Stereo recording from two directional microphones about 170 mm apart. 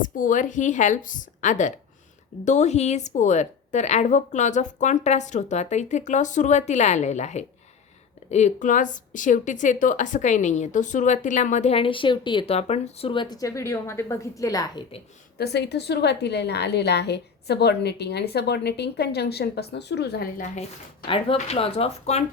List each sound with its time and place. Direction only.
0.0 s a woman's voice: 50° left (ahead or behind); by 14.8 s 20° left (ahead or behind)
15.4 s a woman's voice: 75° left (ahead or behind)
21.3 s speech: 40° left (ahead or behind)